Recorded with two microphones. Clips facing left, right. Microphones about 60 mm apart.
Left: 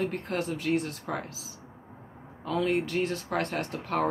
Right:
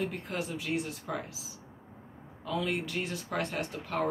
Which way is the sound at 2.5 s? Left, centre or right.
Left.